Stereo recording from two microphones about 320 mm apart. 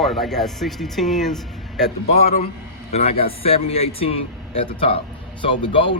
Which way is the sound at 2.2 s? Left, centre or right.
Centre.